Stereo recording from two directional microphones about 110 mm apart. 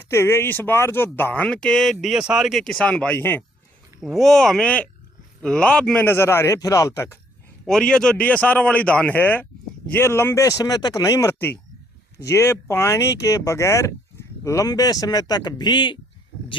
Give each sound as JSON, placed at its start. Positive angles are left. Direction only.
{"t": 0.0, "sound": "speech", "side_deg": 25}
{"t": 3.2, "sound": "speech", "side_deg": 20}
{"t": 4.0, "sound": "speech", "side_deg": 0}
{"t": 6.1, "sound": "speech", "side_deg": 20}
{"t": 7.7, "sound": "speech", "side_deg": 5}